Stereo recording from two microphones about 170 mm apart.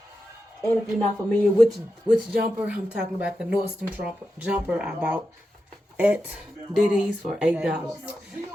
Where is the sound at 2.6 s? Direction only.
10° right (ahead or behind).